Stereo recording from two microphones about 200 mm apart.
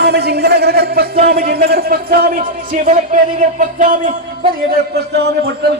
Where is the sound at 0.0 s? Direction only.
55° right (ahead or behind).